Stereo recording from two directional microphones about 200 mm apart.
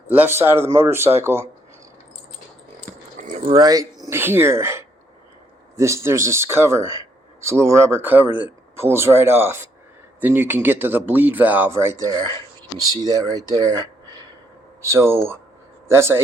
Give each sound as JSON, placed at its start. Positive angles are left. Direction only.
{"t": 0.1, "sound": "speech", "side_deg": -10}
{"t": 3.2, "sound": "a sound", "side_deg": -35}
{"t": 5.7, "sound": "speech", "side_deg": -15}